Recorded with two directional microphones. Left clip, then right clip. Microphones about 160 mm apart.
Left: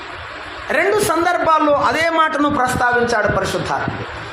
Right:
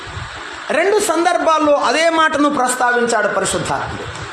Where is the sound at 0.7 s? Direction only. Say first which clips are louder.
Right 1 dB; 40° right (ahead or behind).